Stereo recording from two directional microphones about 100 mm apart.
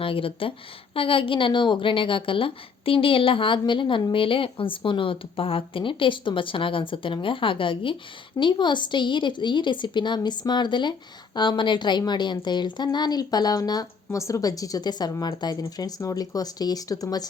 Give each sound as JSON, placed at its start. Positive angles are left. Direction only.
{"t": 0.0, "sound": "a woman's voice", "side_deg": 65}